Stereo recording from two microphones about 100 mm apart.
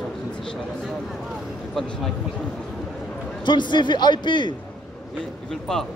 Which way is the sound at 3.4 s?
50° left (ahead or behind).